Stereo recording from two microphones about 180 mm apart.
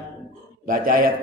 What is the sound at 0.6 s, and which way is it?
Speech, 50° right (ahead or behind).